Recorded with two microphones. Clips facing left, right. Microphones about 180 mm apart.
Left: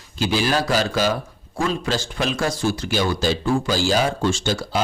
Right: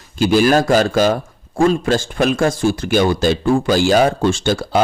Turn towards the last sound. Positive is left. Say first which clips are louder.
# right 6 dB
turn(degrees=-55)  # may be behind; listen again after turning